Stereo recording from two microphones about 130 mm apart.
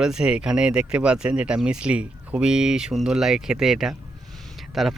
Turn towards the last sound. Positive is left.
turn(degrees=0)  # may be behind; listen again after turning